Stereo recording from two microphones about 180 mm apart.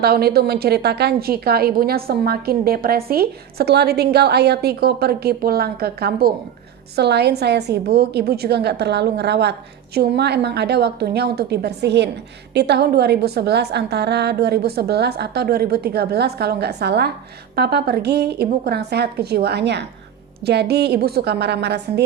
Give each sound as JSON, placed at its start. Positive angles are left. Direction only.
{"t": 0.0, "sound": "a woman's voice", "side_deg": -60}